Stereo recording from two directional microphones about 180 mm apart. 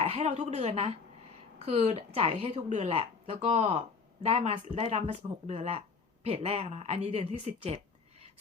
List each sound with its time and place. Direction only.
0.0 s speech: 35° right (ahead or behind)